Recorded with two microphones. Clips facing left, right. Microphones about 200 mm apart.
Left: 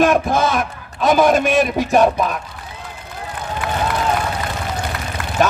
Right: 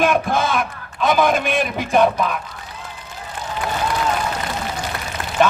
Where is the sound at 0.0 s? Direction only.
45° left (ahead or behind).